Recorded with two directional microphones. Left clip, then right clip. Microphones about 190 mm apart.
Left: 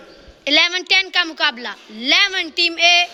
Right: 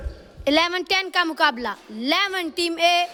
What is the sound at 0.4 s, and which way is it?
A woman's voice, 30° right (ahead or behind).